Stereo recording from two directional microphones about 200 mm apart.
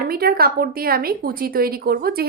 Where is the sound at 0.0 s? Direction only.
50° right (ahead or behind).